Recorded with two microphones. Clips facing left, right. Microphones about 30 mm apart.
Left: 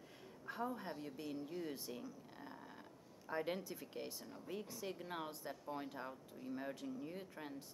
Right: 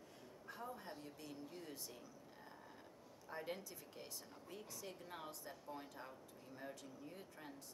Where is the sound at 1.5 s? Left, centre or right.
Centre.